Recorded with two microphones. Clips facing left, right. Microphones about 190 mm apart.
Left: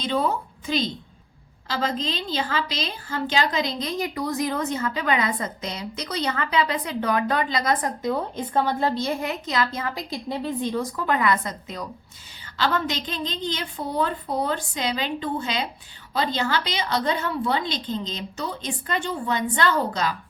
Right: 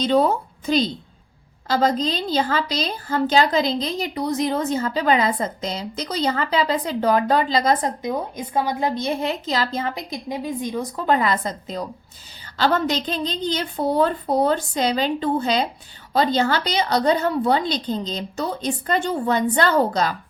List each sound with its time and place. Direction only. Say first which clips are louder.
0.0 s a woman's voice: right 6 dB; 40° right (ahead or behind)
7.9 s a woman's voice: right 1 dB; 15° right (ahead or behind)
9.2 s a woman's voice: right 2 dB; 30° right (ahead or behind); by 10.8 s 15° right (ahead or behind)
10.9 s a woman's voice: right 5 dB; 30° right (ahead or behind)